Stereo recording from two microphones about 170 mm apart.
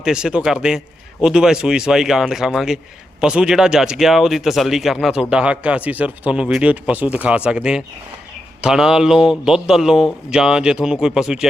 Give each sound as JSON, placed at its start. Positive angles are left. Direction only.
{"t": 0.0, "sound": "a man's voice", "side_deg": -5}